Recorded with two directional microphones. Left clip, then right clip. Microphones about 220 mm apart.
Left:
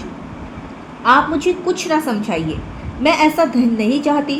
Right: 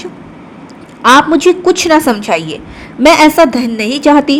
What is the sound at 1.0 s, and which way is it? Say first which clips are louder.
A woman's voice: right 7 dB; 45° right (ahead or behind).